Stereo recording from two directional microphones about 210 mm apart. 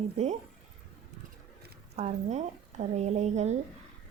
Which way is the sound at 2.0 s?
30° right (ahead or behind).